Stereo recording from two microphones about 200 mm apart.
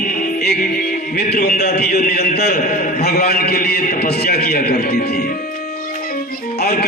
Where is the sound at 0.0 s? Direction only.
45° left (ahead or behind).